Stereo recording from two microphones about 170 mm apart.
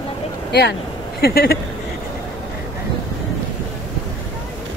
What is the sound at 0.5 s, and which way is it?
Speech, 75° left (ahead or behind).